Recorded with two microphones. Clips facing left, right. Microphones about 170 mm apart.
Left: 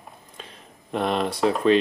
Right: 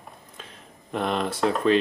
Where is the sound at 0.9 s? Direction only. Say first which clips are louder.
Left 2 dB; 5° left (ahead or behind).